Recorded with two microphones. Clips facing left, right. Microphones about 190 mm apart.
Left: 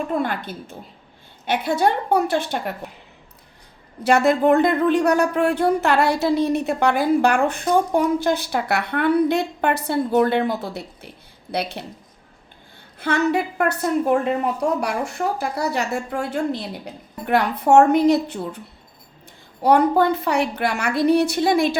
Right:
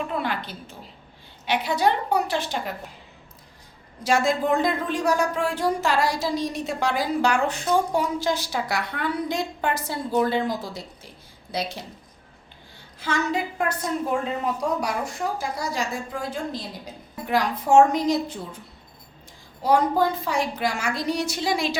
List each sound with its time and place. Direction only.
0.1 s a woman's voice: 50° left (ahead or behind)
4.0 s speech: 60° left (ahead or behind)
13.0 s speech: 60° left (ahead or behind)
19.6 s speech: 65° left (ahead or behind)